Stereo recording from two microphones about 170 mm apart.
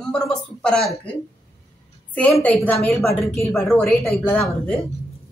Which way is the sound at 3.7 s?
15° left (ahead or behind).